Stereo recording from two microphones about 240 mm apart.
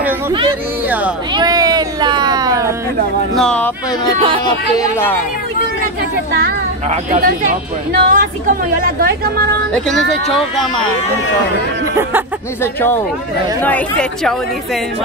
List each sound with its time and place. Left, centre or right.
0.3 s speech: right
1.3 s a sound: centre
3.3 s speech: centre
6.9 s speech: right
13.6 s speech: centre